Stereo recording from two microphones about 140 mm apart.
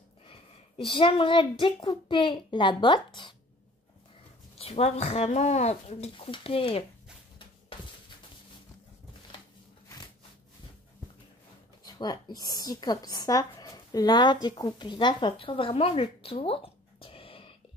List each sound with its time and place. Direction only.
0.2 s a woman's voice: 40° left (ahead or behind)
4.6 s speech: 45° left (ahead or behind)
11.8 s a woman's voice: 30° left (ahead or behind)